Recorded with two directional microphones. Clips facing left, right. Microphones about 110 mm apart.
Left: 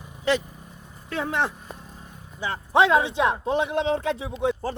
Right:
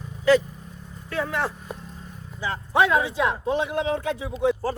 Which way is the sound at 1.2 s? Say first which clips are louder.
Even; 20° left (ahead or behind).